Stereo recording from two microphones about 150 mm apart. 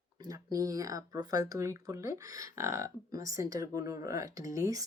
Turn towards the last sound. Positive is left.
turn(degrees=-20)  # may be behind; listen again after turning